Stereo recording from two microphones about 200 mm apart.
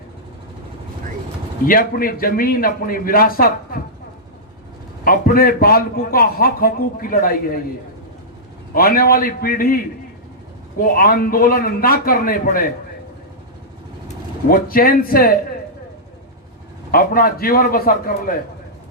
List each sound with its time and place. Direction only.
1.6 s a man's voice: 45° left (ahead or behind)
5.0 s a man's voice: 45° left (ahead or behind)
8.7 s a man's voice: 45° left (ahead or behind)
14.5 s a man's voice: 45° left (ahead or behind)
16.9 s a man's voice: 45° left (ahead or behind)